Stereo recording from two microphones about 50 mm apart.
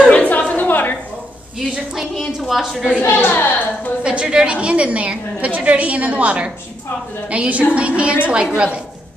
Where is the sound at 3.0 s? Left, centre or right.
Left.